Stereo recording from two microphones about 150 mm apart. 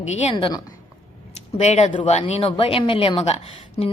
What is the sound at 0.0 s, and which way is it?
Speech, 50° left (ahead or behind).